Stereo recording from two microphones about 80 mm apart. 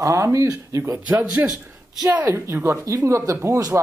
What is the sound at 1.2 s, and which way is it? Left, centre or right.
Speech, centre.